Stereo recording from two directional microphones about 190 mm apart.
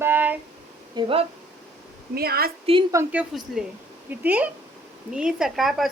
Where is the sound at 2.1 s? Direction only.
55° right (ahead or behind).